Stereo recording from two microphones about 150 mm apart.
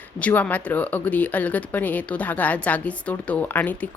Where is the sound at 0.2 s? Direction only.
10° left (ahead or behind).